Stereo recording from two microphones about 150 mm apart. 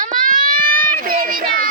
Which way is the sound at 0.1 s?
65° right (ahead or behind).